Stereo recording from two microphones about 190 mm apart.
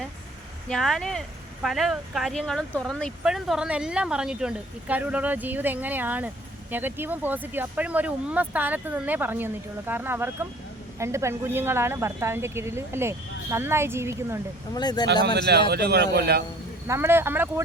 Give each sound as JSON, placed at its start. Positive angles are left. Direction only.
{"t": 0.7, "sound": "speech", "side_deg": 0}
{"t": 14.7, "sound": "speech", "side_deg": 20}
{"t": 15.0, "sound": "speech", "side_deg": -60}
{"t": 16.8, "sound": "speech", "side_deg": -15}